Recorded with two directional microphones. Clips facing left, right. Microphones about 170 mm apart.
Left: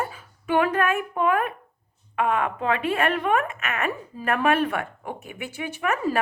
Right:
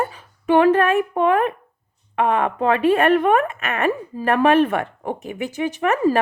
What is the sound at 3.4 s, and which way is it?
A woman's voice, 35° right (ahead or behind).